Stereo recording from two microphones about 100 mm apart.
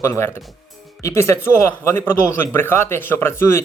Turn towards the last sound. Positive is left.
turn(degrees=25)  # may be behind; listen again after turning